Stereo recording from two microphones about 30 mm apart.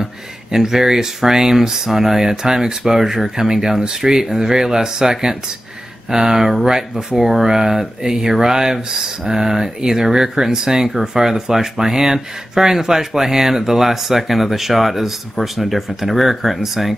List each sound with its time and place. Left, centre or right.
0.0 s speech: centre